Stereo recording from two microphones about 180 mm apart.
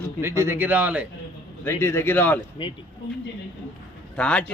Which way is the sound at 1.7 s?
15° left (ahead or behind).